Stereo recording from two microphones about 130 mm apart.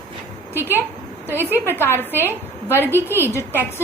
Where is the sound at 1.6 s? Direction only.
15° left (ahead or behind).